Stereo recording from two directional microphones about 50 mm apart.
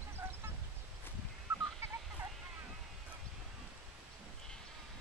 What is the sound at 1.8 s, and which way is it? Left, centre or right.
Fowl, right.